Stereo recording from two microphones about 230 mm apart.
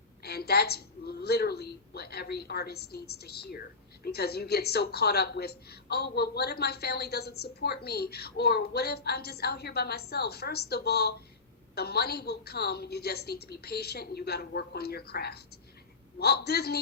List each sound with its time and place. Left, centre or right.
0.2 s speech: left